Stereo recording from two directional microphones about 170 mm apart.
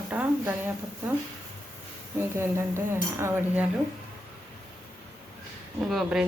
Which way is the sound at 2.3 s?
15° right (ahead or behind).